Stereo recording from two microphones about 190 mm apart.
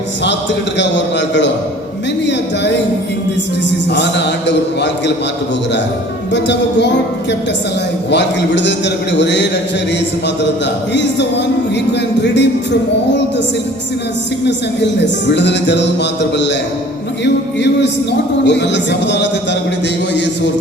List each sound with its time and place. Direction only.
0.8 s speech: 70° left (ahead or behind)
3.9 s a man's voice: 65° left (ahead or behind)
6.3 s a man's voice: 65° left (ahead or behind)
10.9 s a man's voice: 65° left (ahead or behind)
15.0 s speech: 65° left (ahead or behind)
18.4 s speech: 65° left (ahead or behind)